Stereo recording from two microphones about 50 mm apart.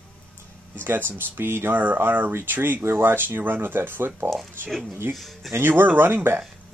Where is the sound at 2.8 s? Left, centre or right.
Right.